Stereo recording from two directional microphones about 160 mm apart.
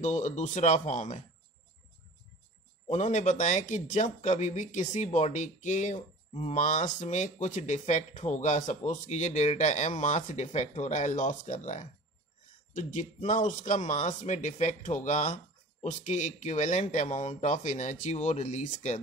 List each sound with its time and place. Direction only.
0.0 s speech: 50° left (ahead or behind)
2.9 s speech: 45° left (ahead or behind)